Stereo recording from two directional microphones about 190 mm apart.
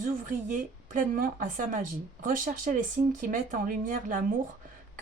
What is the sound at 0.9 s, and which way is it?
Speech, 45° right (ahead or behind).